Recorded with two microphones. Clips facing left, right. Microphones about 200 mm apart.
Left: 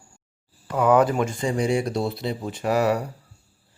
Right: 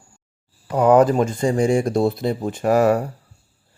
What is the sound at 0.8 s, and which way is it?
Speech, 40° right (ahead or behind).